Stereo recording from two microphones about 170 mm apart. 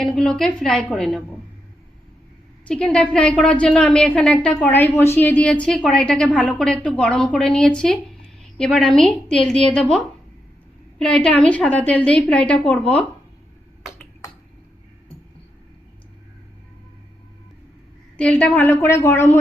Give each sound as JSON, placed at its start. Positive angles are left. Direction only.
{"t": 0.0, "sound": "a woman's voice", "side_deg": 5}
{"t": 2.6, "sound": "a woman's voice", "side_deg": 5}
{"t": 10.9, "sound": "a woman's voice", "side_deg": 5}
{"t": 18.2, "sound": "a woman's voice", "side_deg": 5}